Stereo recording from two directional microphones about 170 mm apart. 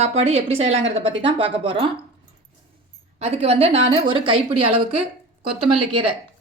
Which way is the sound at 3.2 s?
35° right (ahead or behind).